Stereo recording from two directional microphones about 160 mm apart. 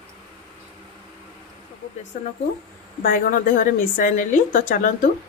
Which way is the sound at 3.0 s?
60° left (ahead or behind).